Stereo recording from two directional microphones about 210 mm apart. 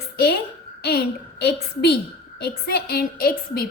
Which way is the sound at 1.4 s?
50° left (ahead or behind).